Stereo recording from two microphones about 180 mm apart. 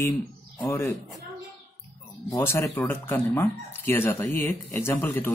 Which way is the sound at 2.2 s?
15° left (ahead or behind).